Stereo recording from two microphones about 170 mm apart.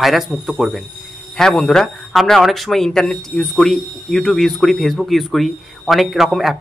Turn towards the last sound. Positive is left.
turn(degrees=0)  # may be behind; listen again after turning